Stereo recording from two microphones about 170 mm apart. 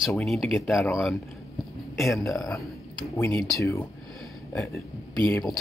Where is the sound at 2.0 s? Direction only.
Centre (ahead or behind).